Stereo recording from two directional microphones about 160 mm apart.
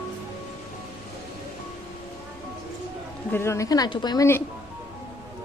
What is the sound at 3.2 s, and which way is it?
A woman's voice, 15° left (ahead or behind).